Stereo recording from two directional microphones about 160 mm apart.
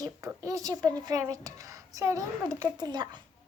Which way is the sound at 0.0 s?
20° right (ahead or behind).